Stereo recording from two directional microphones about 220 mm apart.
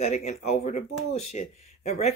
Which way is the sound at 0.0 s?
30° left (ahead or behind).